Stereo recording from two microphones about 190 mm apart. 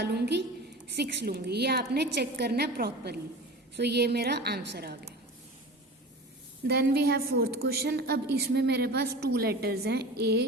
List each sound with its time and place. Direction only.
0.0 s a woman's voice: 60° right (ahead or behind)
6.7 s a woman's voice: 55° right (ahead or behind)